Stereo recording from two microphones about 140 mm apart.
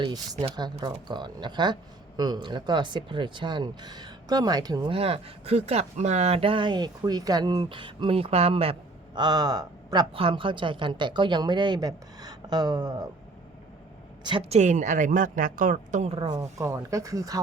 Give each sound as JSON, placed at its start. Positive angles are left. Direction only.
{"t": 0.5, "sound": "speech", "side_deg": -30}
{"t": 4.9, "sound": "speech", "side_deg": -45}
{"t": 9.1, "sound": "speech", "side_deg": -30}
{"t": 14.5, "sound": "speech", "side_deg": -60}
{"t": 16.1, "sound": "speech", "side_deg": -40}
{"t": 16.4, "sound": "speech", "side_deg": -20}